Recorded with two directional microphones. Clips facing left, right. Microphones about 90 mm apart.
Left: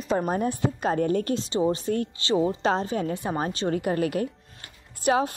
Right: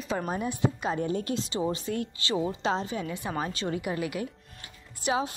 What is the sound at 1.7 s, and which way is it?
Speech, 35° left (ahead or behind).